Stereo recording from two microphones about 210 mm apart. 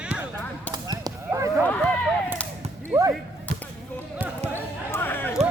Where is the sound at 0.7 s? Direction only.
15° right (ahead or behind).